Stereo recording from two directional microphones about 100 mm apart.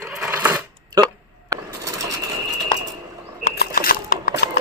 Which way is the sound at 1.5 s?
35° right (ahead or behind).